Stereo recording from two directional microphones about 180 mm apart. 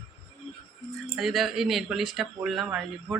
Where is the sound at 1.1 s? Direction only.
Centre (ahead or behind).